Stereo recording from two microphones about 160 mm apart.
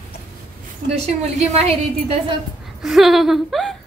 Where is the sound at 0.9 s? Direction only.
40° right (ahead or behind).